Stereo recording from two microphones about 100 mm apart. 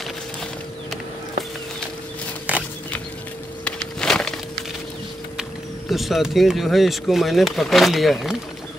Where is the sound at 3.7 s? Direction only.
5° left (ahead or behind).